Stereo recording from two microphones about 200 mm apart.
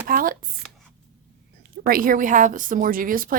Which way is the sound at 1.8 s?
45° right (ahead or behind).